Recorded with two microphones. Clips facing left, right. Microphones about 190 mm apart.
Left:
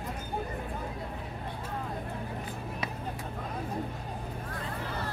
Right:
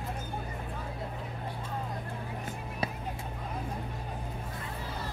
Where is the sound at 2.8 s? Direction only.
30° right (ahead or behind).